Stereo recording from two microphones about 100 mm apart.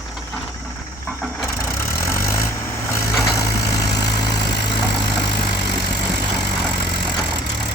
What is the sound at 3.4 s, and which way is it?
Vehicle, 40° left (ahead or behind).